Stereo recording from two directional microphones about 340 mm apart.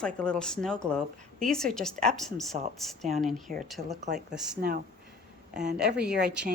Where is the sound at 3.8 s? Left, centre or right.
Right.